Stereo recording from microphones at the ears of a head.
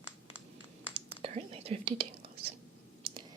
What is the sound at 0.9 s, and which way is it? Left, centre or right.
Whispering, right.